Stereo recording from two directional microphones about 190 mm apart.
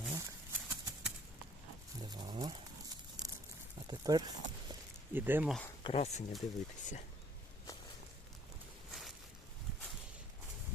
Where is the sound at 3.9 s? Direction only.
20° right (ahead or behind).